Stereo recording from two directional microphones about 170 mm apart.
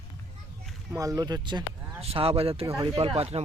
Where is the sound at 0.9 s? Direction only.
20° right (ahead or behind).